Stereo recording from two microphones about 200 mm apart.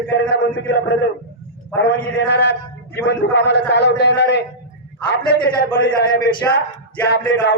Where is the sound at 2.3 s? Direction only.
55° left (ahead or behind).